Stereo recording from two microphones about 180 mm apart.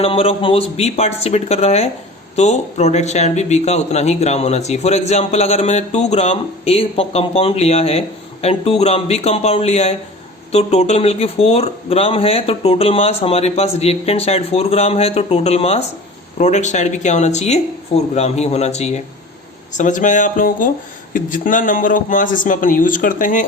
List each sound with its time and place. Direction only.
0.0 s a man's voice: 35° left (ahead or behind)